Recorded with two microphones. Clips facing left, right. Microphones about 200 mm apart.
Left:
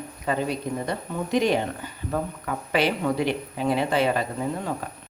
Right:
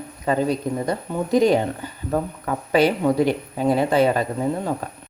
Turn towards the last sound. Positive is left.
turn(degrees=-40)  # may be behind; listen again after turning